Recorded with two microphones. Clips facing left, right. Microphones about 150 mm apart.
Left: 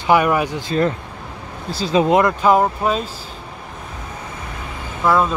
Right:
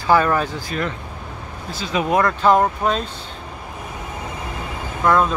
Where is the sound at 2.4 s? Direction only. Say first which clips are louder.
Left 1 dB; 5° left (ahead or behind).